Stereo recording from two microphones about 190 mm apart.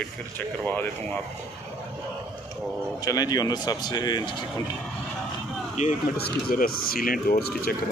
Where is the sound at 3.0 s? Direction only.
20° left (ahead or behind).